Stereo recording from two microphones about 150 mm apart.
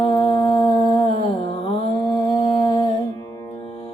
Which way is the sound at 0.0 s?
35° left (ahead or behind).